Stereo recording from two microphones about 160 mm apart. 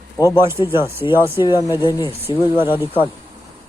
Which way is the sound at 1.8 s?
30° left (ahead or behind).